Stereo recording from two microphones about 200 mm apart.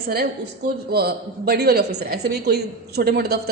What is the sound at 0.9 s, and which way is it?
A woman's voice, 50° right (ahead or behind).